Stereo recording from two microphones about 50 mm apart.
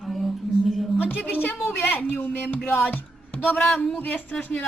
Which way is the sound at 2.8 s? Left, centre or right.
Left.